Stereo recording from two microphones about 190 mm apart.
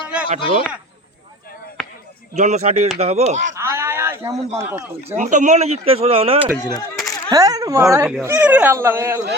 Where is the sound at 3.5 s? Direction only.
15° right (ahead or behind).